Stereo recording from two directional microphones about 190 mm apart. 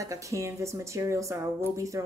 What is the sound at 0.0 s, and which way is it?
Speech, 15° right (ahead or behind).